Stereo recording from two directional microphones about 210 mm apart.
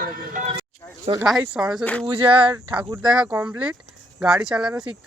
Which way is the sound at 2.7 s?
5° right (ahead or behind).